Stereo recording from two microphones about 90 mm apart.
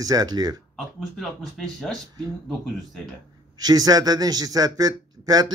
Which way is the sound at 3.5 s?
45° right (ahead or behind).